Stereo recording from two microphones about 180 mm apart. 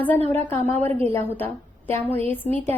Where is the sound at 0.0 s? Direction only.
10° left (ahead or behind).